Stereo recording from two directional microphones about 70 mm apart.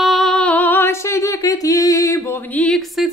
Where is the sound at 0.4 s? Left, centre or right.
Left.